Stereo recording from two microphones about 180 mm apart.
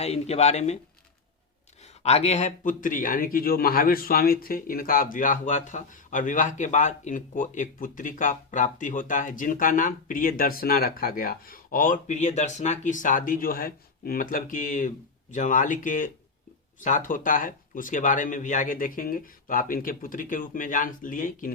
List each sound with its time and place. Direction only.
0.0 s speech: 35° left (ahead or behind)
2.0 s speech: 35° left (ahead or behind)